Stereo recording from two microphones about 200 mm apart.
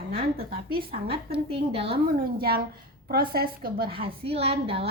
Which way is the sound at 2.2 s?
50° right (ahead or behind).